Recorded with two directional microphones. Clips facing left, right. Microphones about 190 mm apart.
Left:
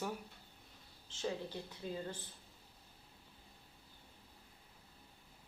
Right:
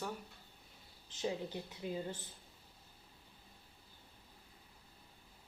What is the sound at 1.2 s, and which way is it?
Speech, 20° right (ahead or behind).